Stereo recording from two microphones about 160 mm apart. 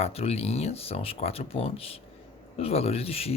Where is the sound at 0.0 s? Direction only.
40° left (ahead or behind).